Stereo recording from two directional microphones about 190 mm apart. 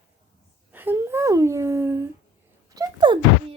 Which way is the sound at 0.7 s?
10° right (ahead or behind).